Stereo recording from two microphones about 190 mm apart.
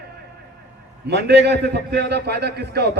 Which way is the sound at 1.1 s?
65° right (ahead or behind).